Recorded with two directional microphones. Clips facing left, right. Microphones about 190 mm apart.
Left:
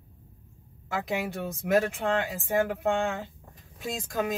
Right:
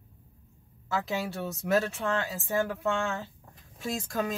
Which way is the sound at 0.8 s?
15° left (ahead or behind).